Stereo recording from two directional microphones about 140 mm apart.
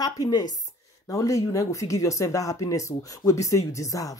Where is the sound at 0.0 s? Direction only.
30° left (ahead or behind).